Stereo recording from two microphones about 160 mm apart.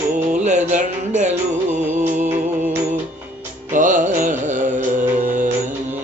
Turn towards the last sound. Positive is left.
turn(degrees=-55)  # may be behind; listen again after turning